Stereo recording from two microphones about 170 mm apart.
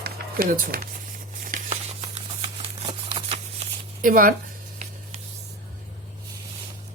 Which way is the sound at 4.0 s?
55° right (ahead or behind).